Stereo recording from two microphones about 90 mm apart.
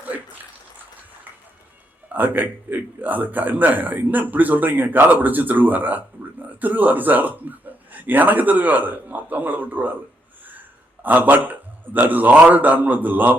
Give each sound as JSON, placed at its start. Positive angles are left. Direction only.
{"t": 2.1, "sound": "a man's voice", "side_deg": -20}
{"t": 11.0, "sound": "a man's voice", "side_deg": -20}